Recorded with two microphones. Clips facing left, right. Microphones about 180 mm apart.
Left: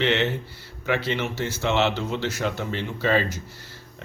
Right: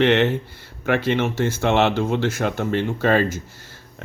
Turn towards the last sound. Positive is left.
turn(degrees=-50)  # may be behind; listen again after turning